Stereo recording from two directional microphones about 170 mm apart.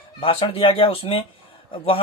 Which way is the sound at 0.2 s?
30° left (ahead or behind).